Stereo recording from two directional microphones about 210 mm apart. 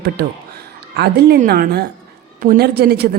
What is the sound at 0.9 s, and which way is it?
A woman's voice, 50° right (ahead or behind).